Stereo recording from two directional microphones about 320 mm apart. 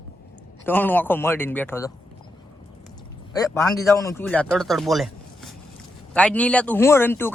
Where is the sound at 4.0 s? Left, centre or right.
Centre.